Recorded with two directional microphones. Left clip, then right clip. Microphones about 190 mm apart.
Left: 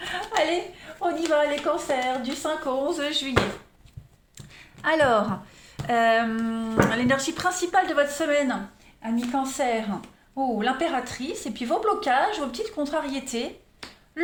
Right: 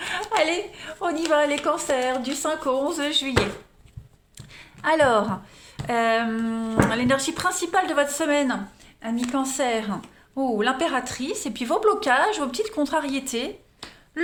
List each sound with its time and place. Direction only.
0.0 s a sound: 30° right (ahead or behind)
1.3 s speech: 35° right (ahead or behind)
4.4 s speech: 15° right (ahead or behind)
9.0 s speech: 40° right (ahead or behind)
13.8 s finger snapping: 5° right (ahead or behind)